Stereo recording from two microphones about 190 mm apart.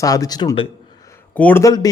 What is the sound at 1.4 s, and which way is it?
Mantra, 10° left (ahead or behind).